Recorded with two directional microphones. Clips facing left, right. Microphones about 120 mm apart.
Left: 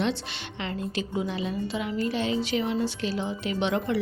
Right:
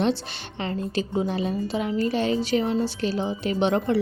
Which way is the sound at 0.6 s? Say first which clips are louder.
Right 4 dB; 35° right (ahead or behind).